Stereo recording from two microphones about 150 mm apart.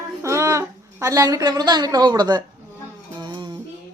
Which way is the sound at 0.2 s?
20° right (ahead or behind).